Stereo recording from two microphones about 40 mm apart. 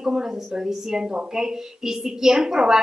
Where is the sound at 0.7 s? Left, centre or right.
Centre.